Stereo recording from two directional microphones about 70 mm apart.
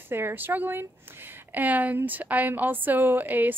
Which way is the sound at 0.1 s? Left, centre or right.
Right.